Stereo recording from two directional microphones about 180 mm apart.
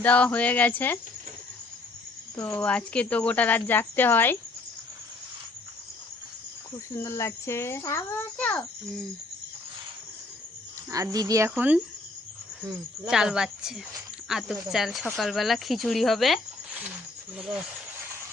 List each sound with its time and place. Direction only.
0.0 s speech: 5° left (ahead or behind)
2.3 s speech: 10° left (ahead or behind)
6.7 s speech: 15° left (ahead or behind)
10.9 s speech: 20° right (ahead or behind)
13.1 s speech: 5° right (ahead or behind)